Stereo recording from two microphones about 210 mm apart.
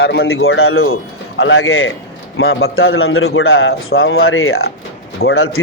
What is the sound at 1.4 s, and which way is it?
A man's voice, 70° left (ahead or behind).